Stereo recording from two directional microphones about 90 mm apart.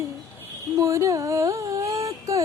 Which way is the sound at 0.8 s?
35° right (ahead or behind).